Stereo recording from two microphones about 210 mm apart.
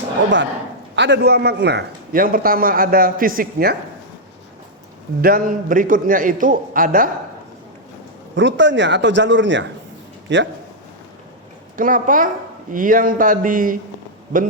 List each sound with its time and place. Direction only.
0.9 s a man's voice: 60° right (ahead or behind)
5.2 s a man's voice: 45° right (ahead or behind)
8.4 s speech: 60° right (ahead or behind)
11.8 s a man's voice: 40° right (ahead or behind)